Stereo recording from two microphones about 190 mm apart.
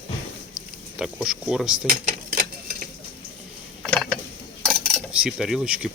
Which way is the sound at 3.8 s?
5° left (ahead or behind).